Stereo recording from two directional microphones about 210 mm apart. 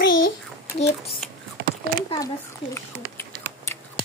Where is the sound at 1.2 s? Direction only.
Centre (ahead or behind).